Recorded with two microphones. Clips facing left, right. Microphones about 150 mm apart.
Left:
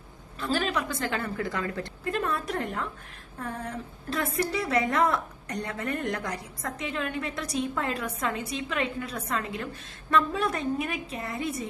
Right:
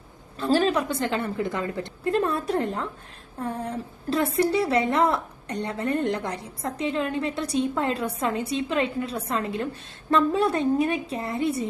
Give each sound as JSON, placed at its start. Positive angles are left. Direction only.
{"t": 0.3, "sound": "a woman's voice", "side_deg": -30}